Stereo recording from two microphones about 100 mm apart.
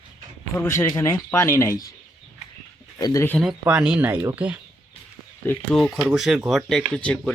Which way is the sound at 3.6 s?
10° right (ahead or behind).